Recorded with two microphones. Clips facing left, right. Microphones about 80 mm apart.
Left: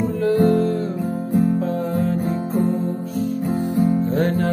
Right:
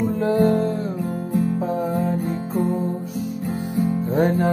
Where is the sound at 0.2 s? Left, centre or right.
Right.